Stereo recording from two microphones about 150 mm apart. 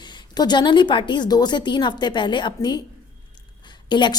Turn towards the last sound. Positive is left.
turn(degrees=30)  # may be behind; listen again after turning